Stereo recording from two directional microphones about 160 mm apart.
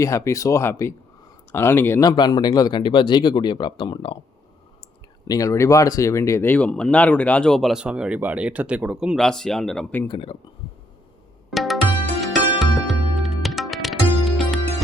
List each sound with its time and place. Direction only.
0.0 s speech: 20° left (ahead or behind)
5.3 s speech: 20° left (ahead or behind); by 10.0 s 5° left (ahead or behind)
10.1 s speech: 35° left (ahead or behind)
11.5 s music: centre (ahead or behind)